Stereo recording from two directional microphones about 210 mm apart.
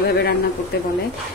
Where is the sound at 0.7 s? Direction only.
50° left (ahead or behind).